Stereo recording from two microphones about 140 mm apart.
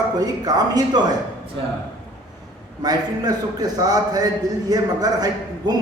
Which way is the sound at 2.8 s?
30° right (ahead or behind).